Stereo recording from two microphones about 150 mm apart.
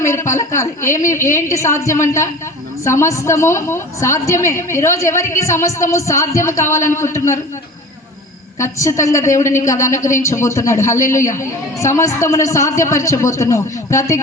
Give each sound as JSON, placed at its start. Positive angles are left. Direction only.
{"t": 0.0, "sound": "a woman's voice", "side_deg": 20}
{"t": 8.5, "sound": "a woman's voice", "side_deg": 20}